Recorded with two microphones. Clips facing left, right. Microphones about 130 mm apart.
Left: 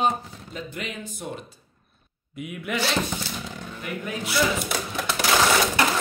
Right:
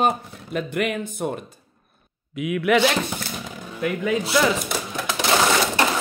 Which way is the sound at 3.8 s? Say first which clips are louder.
Right 10 dB; 90° right.